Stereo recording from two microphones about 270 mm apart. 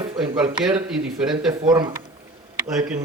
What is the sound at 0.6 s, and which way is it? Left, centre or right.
Speech, centre.